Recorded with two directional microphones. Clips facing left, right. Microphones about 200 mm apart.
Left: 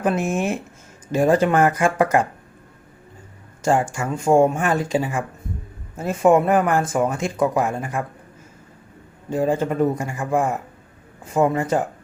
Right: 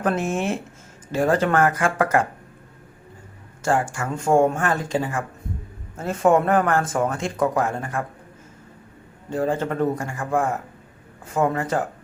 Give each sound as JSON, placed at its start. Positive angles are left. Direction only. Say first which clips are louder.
{"t": 0.0, "sound": "speech", "louder": "left 2 dB", "side_deg": 10}
{"t": 3.6, "sound": "speech", "louder": "left 2 dB", "side_deg": 20}
{"t": 9.3, "sound": "speech", "louder": "left 3 dB", "side_deg": 10}